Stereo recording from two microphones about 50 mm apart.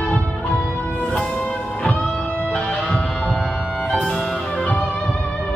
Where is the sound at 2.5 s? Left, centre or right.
Centre.